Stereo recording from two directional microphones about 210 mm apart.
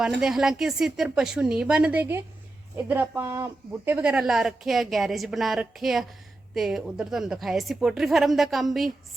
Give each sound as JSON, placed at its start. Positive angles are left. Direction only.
{"t": 0.2, "sound": "a woman's voice", "side_deg": 0}